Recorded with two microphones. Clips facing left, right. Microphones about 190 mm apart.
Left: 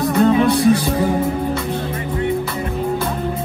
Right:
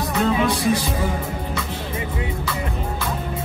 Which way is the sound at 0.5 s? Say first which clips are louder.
Left 6 dB; 60° left (ahead or behind).